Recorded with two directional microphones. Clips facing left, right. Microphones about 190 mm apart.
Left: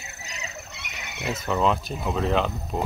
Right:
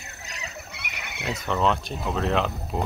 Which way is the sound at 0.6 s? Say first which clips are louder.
Right 1 dB; 10° right (ahead or behind).